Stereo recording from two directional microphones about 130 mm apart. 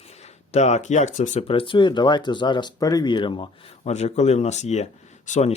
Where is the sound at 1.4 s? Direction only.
45° left (ahead or behind).